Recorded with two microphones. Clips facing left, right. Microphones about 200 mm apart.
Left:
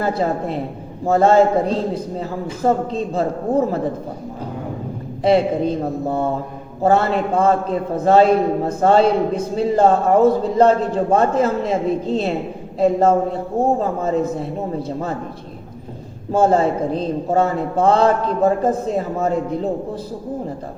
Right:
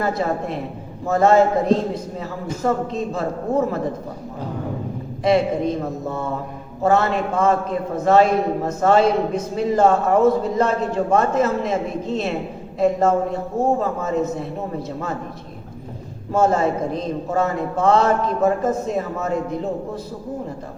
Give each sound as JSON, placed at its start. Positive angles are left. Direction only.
{"t": 0.0, "sound": "a man's voice", "side_deg": 30}
{"t": 5.2, "sound": "a man's voice", "side_deg": 30}
{"t": 16.3, "sound": "a man's voice", "side_deg": 30}